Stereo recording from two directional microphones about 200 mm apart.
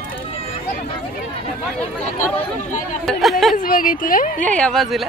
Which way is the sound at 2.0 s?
35° left (ahead or behind).